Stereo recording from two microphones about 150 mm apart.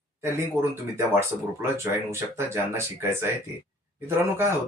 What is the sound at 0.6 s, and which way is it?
Speech, 15° right (ahead or behind).